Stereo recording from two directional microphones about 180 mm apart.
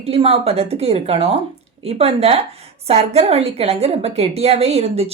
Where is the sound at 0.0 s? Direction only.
35° right (ahead or behind).